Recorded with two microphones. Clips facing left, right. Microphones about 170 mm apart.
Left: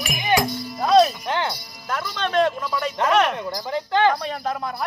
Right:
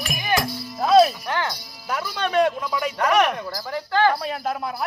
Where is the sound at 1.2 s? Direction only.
15° left (ahead or behind).